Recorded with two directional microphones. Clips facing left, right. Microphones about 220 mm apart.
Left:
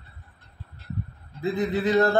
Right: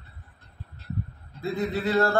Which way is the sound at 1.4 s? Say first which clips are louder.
Left 3 dB; 15° left (ahead or behind).